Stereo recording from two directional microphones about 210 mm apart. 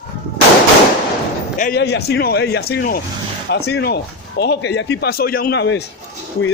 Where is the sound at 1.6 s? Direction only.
50° left (ahead or behind).